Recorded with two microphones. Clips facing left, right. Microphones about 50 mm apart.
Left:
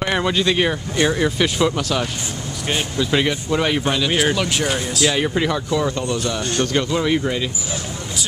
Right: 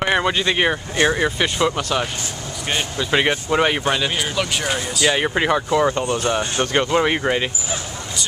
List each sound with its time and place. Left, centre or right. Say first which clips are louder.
0.0 s speech: right 1 dB; centre
4.4 s speech: left 1 dB; centre
5.1 s speech: right 1 dB; right